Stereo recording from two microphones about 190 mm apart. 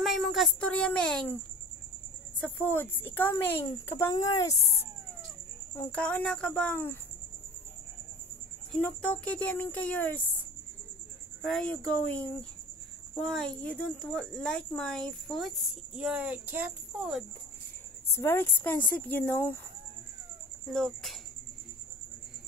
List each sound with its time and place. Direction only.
0.0 s speech: centre (ahead or behind)
2.4 s speech: 10° left (ahead or behind)
5.8 s speech: 5° left (ahead or behind)
8.7 s speech: 5° left (ahead or behind)
11.4 s speech: 5° left (ahead or behind)
18.1 s speech: 15° left (ahead or behind)
20.6 s speech: centre (ahead or behind)